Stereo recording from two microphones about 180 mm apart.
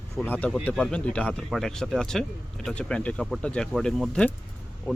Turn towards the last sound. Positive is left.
turn(degrees=10)  # may be behind; listen again after turning